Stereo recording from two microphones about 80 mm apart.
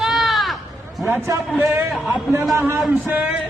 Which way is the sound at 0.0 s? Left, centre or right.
Centre.